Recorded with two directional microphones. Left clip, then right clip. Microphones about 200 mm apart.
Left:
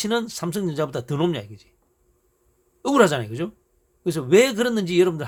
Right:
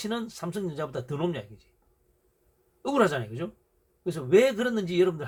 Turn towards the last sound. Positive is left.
turn(degrees=55)  # may be behind; listen again after turning